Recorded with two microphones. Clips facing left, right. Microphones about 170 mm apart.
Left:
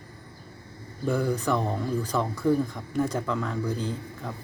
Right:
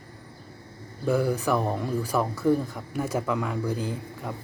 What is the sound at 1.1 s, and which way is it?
Speech, 5° right (ahead or behind).